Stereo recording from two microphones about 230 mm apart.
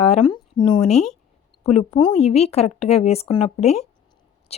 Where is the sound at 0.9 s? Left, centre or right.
Centre.